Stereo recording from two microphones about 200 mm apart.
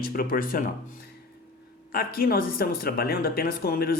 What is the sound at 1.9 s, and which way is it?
Speech, 50° left (ahead or behind).